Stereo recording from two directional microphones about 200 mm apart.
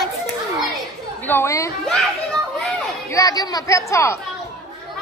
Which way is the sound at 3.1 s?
15° left (ahead or behind).